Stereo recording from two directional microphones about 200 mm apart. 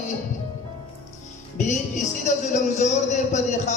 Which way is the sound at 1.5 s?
35° left (ahead or behind).